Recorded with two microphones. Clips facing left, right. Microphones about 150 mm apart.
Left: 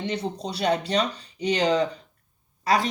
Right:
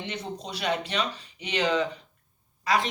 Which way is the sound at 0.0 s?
35° left (ahead or behind).